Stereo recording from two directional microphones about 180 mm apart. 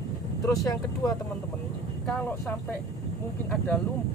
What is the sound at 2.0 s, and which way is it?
Speech, 5° left (ahead or behind).